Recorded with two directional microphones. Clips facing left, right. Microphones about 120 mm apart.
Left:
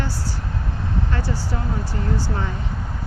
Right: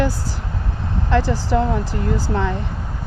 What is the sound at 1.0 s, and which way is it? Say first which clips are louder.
Speech: right 8 dB; 90° right.